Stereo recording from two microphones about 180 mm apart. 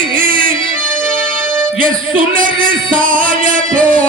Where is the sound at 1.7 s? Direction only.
50° right (ahead or behind).